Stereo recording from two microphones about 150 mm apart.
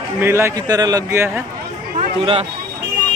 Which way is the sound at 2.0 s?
40° right (ahead or behind).